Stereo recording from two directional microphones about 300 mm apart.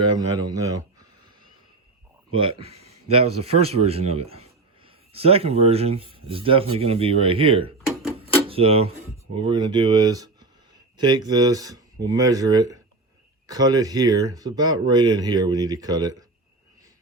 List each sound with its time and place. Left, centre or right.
0.1 s speech: centre
0.5 s a sound: centre
2.3 s speech: centre